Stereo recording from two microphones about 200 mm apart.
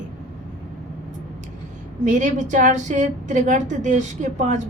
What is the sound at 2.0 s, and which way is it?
A woman's voice, 40° right (ahead or behind).